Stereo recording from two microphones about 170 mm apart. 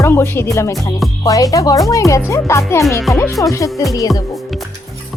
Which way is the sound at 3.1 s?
Centre (ahead or behind).